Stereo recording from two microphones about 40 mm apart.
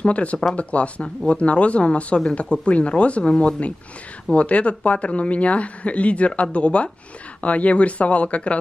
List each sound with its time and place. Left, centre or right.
0.0 s speech: left